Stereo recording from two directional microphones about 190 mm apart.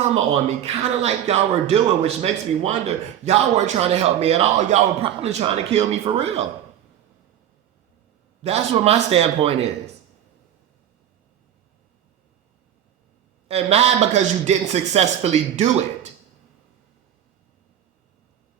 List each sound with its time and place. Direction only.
0.1 s speech: 35° right (ahead or behind)
8.4 s speech: 35° right (ahead or behind)
13.5 s speech: 35° right (ahead or behind)